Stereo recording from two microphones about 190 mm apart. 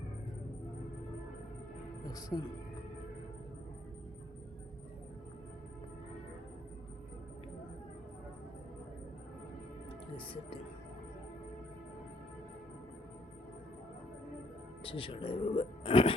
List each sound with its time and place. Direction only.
2.0 s speech: 20° left (ahead or behind)
10.2 s speech: 30° left (ahead or behind)
14.8 s speech: 30° left (ahead or behind)